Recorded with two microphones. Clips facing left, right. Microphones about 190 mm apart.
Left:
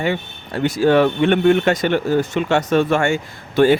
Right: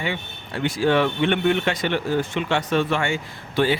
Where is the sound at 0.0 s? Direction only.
45° left (ahead or behind).